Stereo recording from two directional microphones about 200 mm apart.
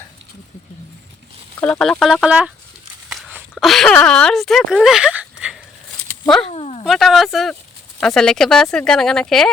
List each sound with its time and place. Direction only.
1.5 s speech: 5° left (ahead or behind)
3.1 s a sound: 5° right (ahead or behind)
3.5 s speech: centre (ahead or behind)
6.5 s bow-wow: 30° left (ahead or behind)
6.8 s speech: centre (ahead or behind)